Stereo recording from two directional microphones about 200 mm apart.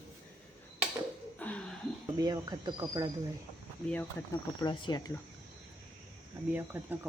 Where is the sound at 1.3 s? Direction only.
5° left (ahead or behind).